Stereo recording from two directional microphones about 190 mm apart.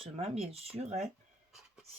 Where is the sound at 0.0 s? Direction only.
30° right (ahead or behind).